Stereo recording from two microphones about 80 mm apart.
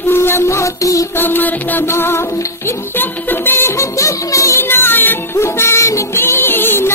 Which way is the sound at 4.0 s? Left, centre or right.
Left.